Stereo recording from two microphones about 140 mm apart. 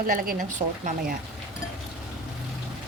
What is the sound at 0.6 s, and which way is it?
Speech, 35° right (ahead or behind).